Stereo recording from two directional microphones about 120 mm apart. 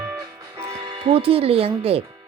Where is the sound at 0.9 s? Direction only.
45° right (ahead or behind).